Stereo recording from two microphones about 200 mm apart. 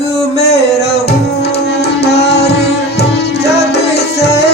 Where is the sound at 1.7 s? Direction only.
55° left (ahead or behind).